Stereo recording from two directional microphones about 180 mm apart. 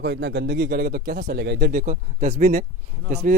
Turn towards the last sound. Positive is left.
turn(degrees=-40)  # may be behind; listen again after turning